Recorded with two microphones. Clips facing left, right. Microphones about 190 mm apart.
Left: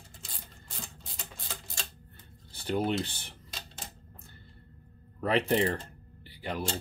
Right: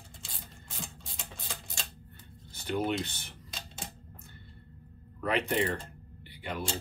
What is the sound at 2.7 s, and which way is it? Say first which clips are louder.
Speech: left 2 dB; 30° left (ahead or behind).